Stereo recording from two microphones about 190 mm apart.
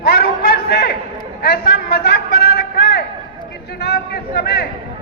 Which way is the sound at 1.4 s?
55° left (ahead or behind).